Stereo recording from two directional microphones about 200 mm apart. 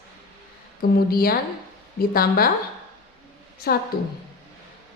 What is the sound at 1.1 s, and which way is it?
A woman's voice, 50° left (ahead or behind).